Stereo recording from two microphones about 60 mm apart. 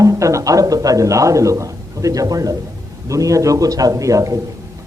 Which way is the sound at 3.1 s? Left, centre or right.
Right.